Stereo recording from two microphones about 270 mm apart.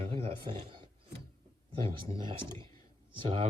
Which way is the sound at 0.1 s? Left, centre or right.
Right.